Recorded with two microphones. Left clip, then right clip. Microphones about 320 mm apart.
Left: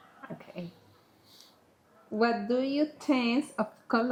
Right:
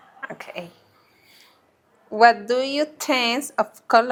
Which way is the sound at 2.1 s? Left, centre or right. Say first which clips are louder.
Right 12 dB; right.